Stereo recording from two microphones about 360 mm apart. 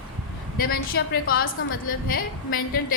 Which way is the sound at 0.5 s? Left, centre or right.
Left.